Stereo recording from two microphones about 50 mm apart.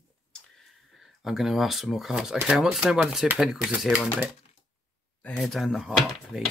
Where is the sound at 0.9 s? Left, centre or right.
Centre.